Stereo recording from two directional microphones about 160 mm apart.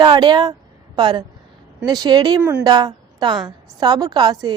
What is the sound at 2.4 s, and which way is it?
Speech, 10° right (ahead or behind).